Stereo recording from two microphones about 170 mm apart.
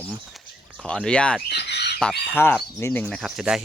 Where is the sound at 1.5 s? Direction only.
80° left.